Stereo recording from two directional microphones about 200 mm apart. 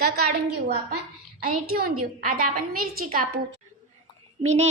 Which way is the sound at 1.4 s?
50° right (ahead or behind).